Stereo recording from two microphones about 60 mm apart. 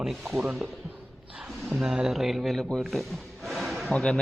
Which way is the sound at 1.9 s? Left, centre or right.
Centre.